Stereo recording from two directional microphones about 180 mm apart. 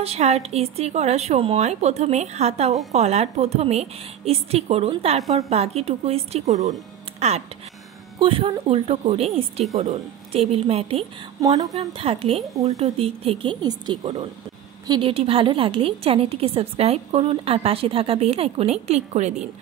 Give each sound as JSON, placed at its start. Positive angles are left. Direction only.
{"t": 0.0, "sound": "a woman's voice", "side_deg": -35}
{"t": 5.2, "sound": "a woman's voice", "side_deg": 0}
{"t": 5.5, "sound": "a woman's voice", "side_deg": -35}
{"t": 11.4, "sound": "speech", "side_deg": -20}
{"t": 11.8, "sound": "a woman's voice", "side_deg": -30}